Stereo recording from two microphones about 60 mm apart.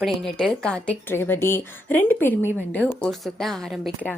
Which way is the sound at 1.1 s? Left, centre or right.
Left.